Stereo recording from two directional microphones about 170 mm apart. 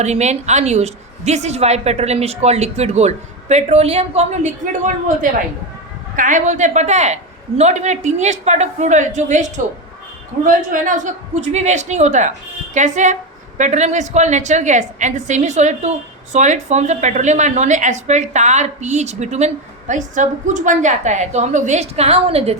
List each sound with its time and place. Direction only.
0.0 s a woman's voice: 40° right (ahead or behind)